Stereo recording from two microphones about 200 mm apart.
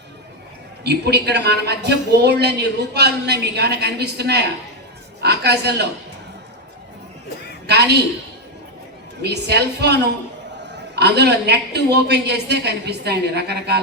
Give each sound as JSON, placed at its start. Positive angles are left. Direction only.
{"t": 0.9, "sound": "a woman's voice", "side_deg": -55}
{"t": 7.7, "sound": "a sound", "side_deg": -55}
{"t": 9.2, "sound": "a woman's voice", "side_deg": -55}